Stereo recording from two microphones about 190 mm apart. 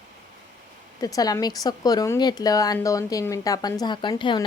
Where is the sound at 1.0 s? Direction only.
20° left (ahead or behind).